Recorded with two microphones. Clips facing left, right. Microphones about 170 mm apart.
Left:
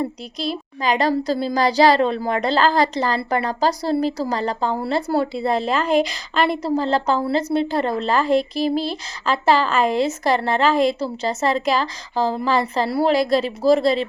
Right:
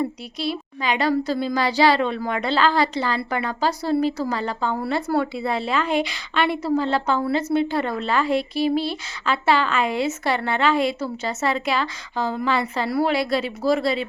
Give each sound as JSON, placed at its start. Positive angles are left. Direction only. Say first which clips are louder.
{"t": 0.0, "sound": "a woman's voice", "louder": "even", "side_deg": 40}